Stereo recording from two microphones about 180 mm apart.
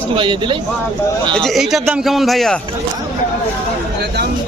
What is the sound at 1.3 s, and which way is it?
Speech, centre (ahead or behind).